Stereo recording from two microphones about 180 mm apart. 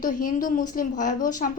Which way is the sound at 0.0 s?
50° left (ahead or behind).